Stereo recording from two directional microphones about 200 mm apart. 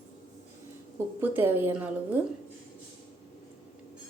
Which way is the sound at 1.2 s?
10° right (ahead or behind).